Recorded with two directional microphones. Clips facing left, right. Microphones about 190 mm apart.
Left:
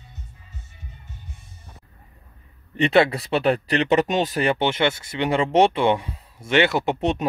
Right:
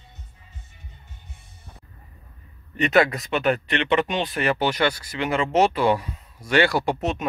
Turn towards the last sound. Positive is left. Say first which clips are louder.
# left 3 dB
turn(degrees=30)  # may be behind; listen again after turning